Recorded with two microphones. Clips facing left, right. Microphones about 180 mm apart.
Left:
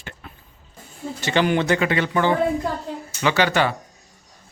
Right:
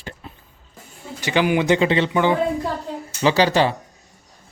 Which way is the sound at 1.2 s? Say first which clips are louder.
Right 1 dB; 10° right (ahead or behind).